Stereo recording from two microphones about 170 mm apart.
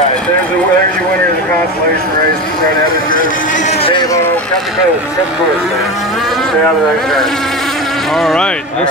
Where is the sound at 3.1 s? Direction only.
50° left (ahead or behind); by 4.2 s 25° left (ahead or behind).